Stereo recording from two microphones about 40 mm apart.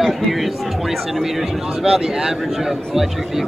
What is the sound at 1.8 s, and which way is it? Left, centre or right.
Speech, centre.